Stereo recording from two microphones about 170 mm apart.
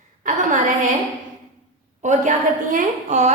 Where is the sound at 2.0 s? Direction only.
45° right (ahead or behind).